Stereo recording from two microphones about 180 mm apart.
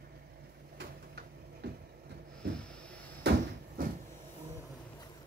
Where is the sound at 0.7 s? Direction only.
65° right (ahead or behind).